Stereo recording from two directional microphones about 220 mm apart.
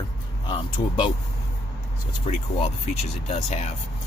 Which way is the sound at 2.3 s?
30° left (ahead or behind).